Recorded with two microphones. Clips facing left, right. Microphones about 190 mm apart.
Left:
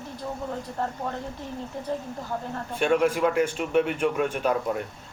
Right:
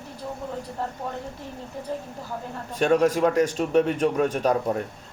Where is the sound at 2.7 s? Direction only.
40° right (ahead or behind).